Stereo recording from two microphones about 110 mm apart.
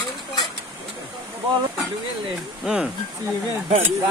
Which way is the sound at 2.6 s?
5° right (ahead or behind).